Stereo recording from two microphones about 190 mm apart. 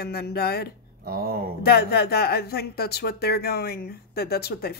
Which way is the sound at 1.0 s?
55° right (ahead or behind).